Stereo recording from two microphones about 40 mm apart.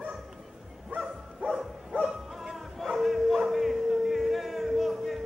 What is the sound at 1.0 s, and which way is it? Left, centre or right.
Dog, centre.